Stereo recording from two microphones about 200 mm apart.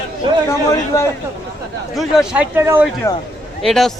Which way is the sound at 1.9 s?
Centre (ahead or behind).